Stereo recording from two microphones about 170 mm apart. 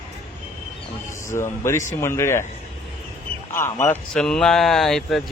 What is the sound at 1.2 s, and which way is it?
Speech, 15° left (ahead or behind).